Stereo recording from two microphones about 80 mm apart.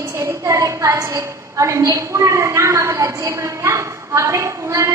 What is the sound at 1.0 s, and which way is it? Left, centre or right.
A woman's voice, right.